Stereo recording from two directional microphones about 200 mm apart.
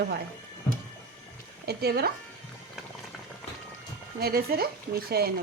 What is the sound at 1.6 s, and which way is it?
Speech, 50° right (ahead or behind).